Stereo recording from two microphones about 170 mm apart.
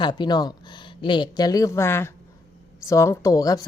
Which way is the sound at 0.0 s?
25° left (ahead or behind).